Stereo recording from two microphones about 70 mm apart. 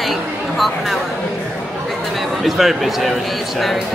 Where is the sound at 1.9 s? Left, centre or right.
Centre.